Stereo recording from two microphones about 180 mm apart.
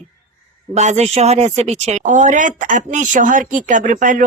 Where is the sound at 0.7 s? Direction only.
40° right (ahead or behind).